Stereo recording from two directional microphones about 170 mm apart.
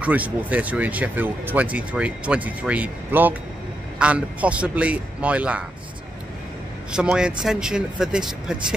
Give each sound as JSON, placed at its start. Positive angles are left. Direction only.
{"t": 0.0, "sound": "speech", "side_deg": -10}
{"t": 6.9, "sound": "speech", "side_deg": -5}